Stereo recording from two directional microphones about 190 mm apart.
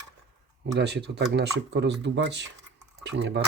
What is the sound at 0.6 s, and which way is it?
Speech, 65° right (ahead or behind).